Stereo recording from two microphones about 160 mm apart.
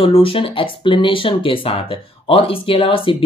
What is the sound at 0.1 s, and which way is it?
Speech, 35° left (ahead or behind).